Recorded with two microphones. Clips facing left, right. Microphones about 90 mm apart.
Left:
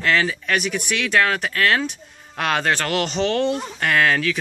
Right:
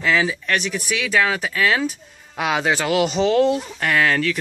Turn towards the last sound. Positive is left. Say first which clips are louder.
# even
turn(degrees=0)  # may be behind; listen again after turning